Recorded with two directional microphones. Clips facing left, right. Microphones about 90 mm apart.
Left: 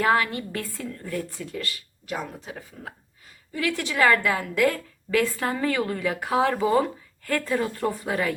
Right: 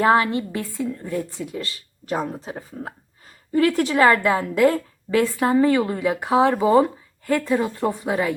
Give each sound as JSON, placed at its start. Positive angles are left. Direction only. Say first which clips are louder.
{"t": 0.0, "sound": "a woman's voice", "louder": "right 5 dB", "side_deg": -25}